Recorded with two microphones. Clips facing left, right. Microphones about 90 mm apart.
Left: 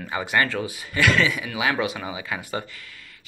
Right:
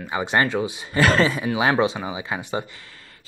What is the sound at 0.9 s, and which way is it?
Speech, 35° right (ahead or behind).